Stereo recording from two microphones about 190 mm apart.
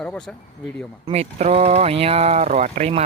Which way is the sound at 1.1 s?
35° right (ahead or behind).